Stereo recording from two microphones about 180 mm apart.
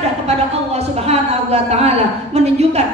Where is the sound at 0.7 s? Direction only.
35° right (ahead or behind).